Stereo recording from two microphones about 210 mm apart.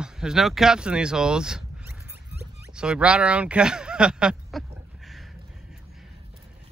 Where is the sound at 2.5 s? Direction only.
5° right (ahead or behind).